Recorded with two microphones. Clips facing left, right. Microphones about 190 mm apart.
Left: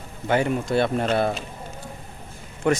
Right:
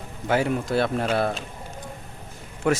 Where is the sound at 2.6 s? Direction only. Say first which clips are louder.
Left 1 dB; 5° right (ahead or behind).